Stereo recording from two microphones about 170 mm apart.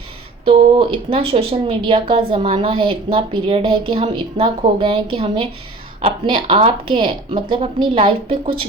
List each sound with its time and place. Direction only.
0.4 s speech: 35° right (ahead or behind)